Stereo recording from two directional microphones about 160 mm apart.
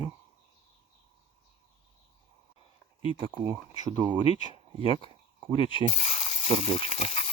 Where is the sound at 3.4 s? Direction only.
20° right (ahead or behind).